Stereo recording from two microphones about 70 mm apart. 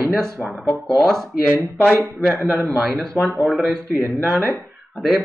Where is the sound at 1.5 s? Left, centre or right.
Right.